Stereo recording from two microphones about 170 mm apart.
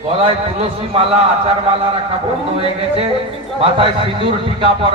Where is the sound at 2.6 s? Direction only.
35° right (ahead or behind).